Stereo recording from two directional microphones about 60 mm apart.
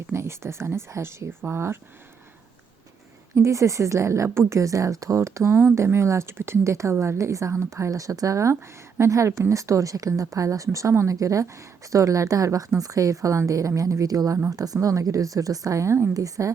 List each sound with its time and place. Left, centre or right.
0.1 s speech: right
3.3 s a woman's voice: right
5.5 s a woman's voice: right
16.1 s a woman's voice: right